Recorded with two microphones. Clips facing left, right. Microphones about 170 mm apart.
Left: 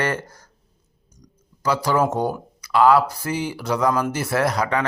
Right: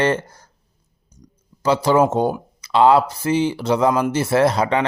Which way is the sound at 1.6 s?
25° right (ahead or behind).